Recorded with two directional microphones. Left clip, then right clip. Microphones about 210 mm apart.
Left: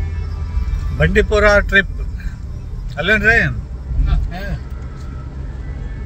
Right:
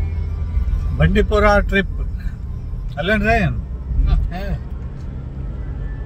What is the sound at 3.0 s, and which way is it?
Speech, 15° right (ahead or behind).